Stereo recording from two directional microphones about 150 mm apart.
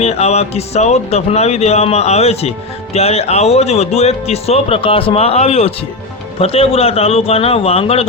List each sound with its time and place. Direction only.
0.0 s a man's voice: 45° left (ahead or behind)